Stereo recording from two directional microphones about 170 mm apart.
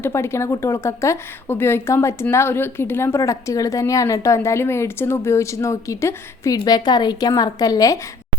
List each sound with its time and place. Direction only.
0.0 s a woman's voice: 15° left (ahead or behind)